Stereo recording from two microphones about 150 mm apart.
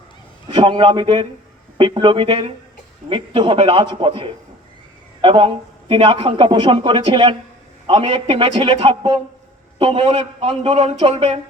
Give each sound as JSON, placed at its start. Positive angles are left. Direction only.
{"t": 0.5, "sound": "a man's voice", "side_deg": -30}